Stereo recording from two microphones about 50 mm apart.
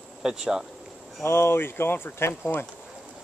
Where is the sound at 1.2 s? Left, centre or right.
Left.